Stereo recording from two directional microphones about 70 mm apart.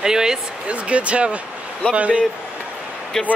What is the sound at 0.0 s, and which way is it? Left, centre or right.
Speech, centre.